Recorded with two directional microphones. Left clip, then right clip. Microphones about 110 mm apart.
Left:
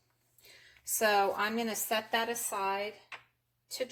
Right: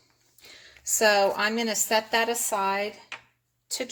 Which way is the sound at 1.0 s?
35° right (ahead or behind).